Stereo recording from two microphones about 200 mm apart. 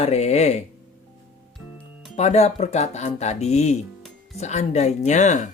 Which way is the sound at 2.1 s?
35° left (ahead or behind).